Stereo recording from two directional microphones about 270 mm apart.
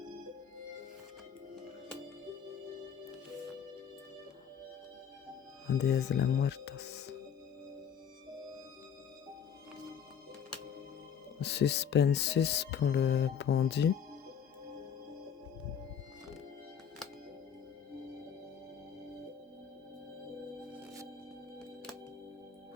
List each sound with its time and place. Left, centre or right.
5.6 s speech: left
11.3 s speech: left